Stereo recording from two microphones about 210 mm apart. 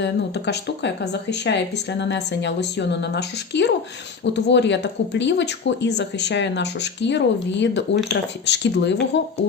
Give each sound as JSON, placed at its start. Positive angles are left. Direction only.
{"t": 0.0, "sound": "speech", "side_deg": 55}